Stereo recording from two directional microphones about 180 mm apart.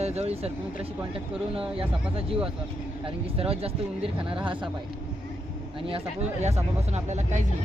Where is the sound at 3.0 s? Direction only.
30° right (ahead or behind).